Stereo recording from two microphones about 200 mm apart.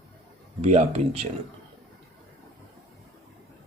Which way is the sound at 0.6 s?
35° right (ahead or behind).